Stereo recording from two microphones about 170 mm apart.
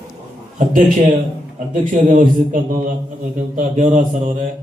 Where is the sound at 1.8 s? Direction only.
50° right (ahead or behind).